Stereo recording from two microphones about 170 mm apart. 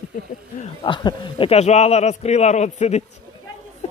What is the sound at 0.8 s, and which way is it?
A man's voice, 30° left (ahead or behind).